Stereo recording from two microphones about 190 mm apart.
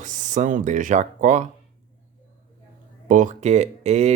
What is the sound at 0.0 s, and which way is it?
Speech, 40° right (ahead or behind).